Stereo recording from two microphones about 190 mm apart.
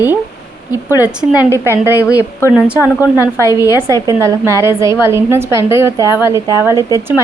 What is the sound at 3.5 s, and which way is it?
A woman's voice, 15° right (ahead or behind).